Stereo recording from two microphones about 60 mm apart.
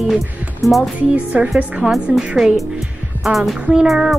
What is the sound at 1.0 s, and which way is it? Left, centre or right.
Speech, right.